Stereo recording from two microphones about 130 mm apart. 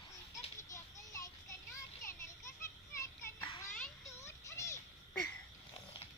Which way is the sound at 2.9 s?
20° left (ahead or behind).